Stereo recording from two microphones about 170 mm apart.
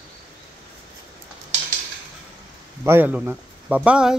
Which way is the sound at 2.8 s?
10° right (ahead or behind).